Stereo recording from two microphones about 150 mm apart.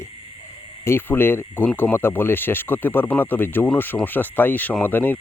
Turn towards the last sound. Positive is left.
turn(degrees=10)  # may be behind; listen again after turning